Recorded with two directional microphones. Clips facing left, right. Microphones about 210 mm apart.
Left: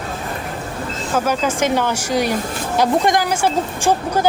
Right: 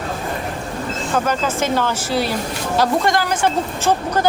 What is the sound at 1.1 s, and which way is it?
Speech, 10° left (ahead or behind).